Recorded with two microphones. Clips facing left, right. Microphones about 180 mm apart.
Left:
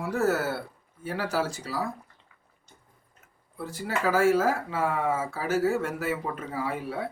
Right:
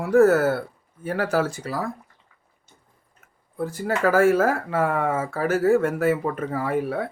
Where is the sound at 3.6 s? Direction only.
45° right (ahead or behind).